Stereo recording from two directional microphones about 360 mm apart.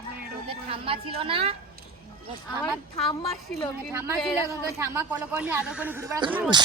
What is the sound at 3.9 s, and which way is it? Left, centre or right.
Speech, centre.